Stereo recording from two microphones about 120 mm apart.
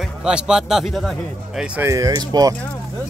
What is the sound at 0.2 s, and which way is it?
Speech, 5° right (ahead or behind).